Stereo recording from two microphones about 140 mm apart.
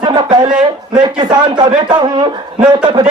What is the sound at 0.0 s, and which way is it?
A man's voice, 35° right (ahead or behind).